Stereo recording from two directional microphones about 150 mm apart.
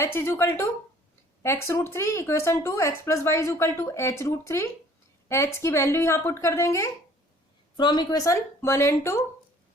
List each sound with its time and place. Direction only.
0.0 s a woman's voice: 15° left (ahead or behind)